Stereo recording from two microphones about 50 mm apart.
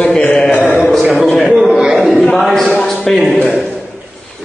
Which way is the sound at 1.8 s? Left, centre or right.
Centre.